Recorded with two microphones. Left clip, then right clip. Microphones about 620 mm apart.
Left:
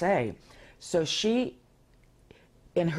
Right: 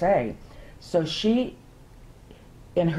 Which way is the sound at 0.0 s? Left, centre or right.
Left.